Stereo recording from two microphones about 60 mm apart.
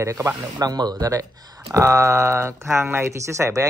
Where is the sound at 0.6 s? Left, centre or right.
Right.